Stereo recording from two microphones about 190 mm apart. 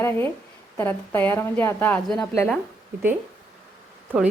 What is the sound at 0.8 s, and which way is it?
A woman's voice, 10° left (ahead or behind).